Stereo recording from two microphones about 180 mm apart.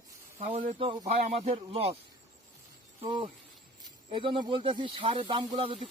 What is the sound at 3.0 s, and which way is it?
Speech, 25° right (ahead or behind).